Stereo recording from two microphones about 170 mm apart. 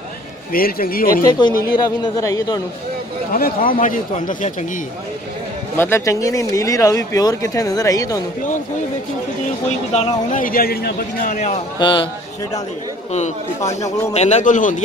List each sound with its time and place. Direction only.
0.5 s a man's voice: 60° left (ahead or behind)
1.2 s speech: 25° left (ahead or behind)
3.3 s a man's voice: 60° left (ahead or behind)
5.8 s speech: 15° left (ahead or behind)
10.3 s a man's voice: 55° left (ahead or behind)
11.8 s speech: 30° left (ahead or behind)
14.1 s a man's voice: 40° left (ahead or behind)